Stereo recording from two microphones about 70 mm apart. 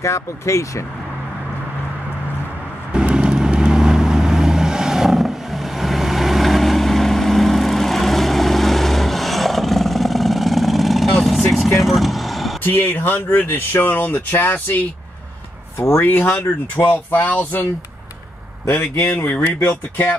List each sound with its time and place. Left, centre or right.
0.0 s speech: left
2.9 s vehicle: centre
12.6 s speech: left
15.8 s speech: left
16.1 s speech: left
18.7 s a man's voice: left